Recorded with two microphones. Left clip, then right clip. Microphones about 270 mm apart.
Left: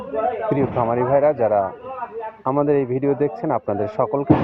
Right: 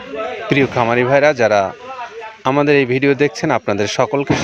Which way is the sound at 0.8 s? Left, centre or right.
Right.